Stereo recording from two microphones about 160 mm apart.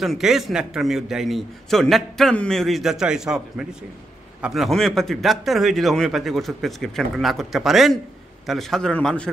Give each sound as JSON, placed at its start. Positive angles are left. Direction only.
{"t": 0.0, "sound": "a man's voice", "side_deg": 0}